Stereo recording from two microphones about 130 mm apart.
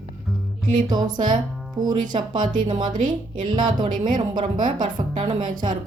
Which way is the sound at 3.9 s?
90° right.